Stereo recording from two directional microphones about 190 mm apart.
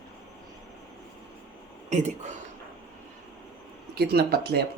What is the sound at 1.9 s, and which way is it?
Speech, 40° right (ahead or behind).